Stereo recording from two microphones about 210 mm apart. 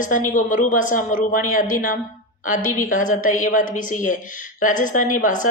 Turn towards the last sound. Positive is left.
turn(degrees=40)  # may be behind; listen again after turning